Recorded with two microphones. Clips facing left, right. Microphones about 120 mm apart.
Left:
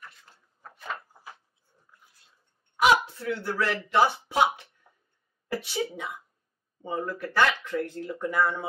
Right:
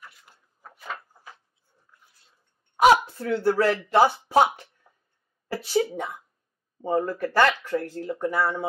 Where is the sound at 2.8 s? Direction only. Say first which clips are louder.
Right 4 dB; 40° right (ahead or behind).